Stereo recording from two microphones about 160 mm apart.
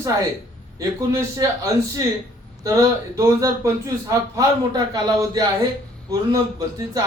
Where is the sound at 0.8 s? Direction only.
20° right (ahead or behind).